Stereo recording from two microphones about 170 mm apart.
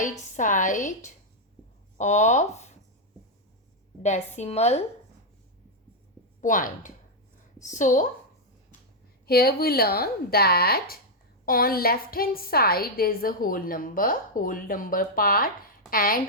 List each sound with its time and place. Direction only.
0.0 s a woman's voice: 50° left (ahead or behind)
4.0 s a woman's voice: 40° left (ahead or behind)
6.4 s speech: 50° left (ahead or behind)
9.2 s a woman's voice: 65° left (ahead or behind)